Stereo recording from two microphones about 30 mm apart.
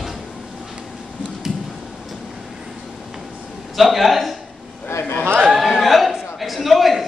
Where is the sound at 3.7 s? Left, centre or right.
Centre.